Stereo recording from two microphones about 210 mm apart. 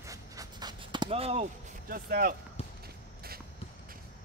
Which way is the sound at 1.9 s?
45° right (ahead or behind).